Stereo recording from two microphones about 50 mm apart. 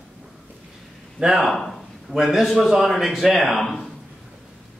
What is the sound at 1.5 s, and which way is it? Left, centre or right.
A man's voice, centre.